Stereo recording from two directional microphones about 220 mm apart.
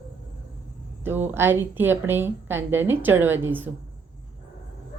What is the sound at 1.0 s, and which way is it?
Speech, 10° right (ahead or behind).